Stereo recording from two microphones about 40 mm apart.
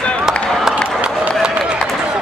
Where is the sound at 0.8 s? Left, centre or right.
Right.